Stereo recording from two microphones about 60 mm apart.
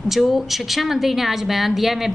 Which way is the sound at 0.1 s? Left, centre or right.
Centre.